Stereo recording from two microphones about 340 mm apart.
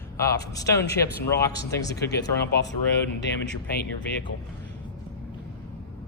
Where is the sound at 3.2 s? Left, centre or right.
Left.